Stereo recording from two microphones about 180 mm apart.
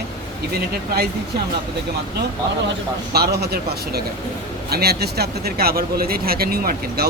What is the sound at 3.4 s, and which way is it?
Speech, 60° right (ahead or behind).